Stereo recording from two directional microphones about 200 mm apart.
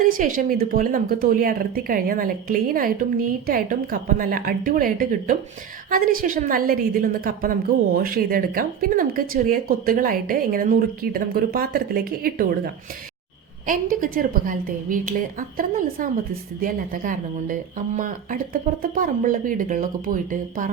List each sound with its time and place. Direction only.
0.0 s a woman's voice: 45° right (ahead or behind)